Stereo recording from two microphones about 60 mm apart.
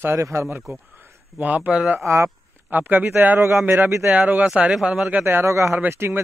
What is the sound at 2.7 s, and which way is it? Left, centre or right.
Speech, right.